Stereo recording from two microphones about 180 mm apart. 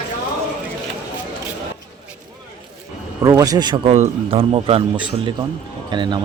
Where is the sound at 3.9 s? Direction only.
35° right (ahead or behind).